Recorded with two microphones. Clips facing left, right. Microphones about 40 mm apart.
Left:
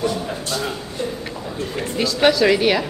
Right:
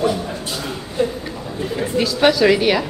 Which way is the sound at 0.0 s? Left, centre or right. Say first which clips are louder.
Right 3 dB; centre.